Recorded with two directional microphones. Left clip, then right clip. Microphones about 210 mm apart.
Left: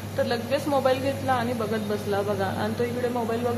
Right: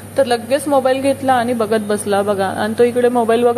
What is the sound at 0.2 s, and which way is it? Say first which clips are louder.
A woman's voice: right 10 dB; 30° right (ahead or behind).